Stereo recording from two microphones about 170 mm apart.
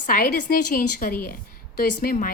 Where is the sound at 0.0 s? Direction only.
55° left (ahead or behind).